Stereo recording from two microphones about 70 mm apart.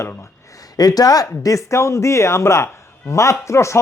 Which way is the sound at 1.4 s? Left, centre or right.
Left.